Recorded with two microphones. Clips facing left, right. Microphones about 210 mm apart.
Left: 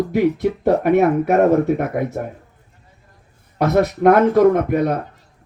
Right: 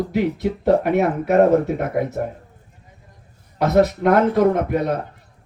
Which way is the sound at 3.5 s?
50° left (ahead or behind).